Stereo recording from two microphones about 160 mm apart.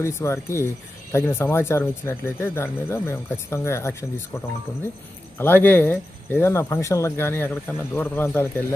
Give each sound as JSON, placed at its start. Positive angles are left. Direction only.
{"t": 0.0, "sound": "speech", "side_deg": 15}
{"t": 5.4, "sound": "speech", "side_deg": 10}